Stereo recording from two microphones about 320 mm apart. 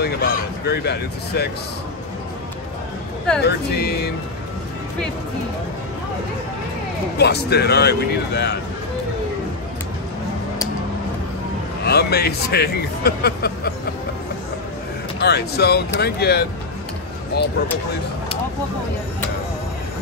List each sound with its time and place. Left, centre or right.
0.0 s speech: left
3.4 s speech: left
7.2 s speech: left
11.8 s speech: left
15.1 s speech: left